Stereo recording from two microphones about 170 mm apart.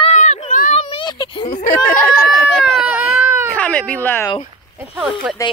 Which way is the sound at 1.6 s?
50° left (ahead or behind).